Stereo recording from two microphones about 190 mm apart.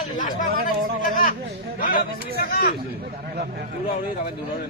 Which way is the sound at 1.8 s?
45° left (ahead or behind).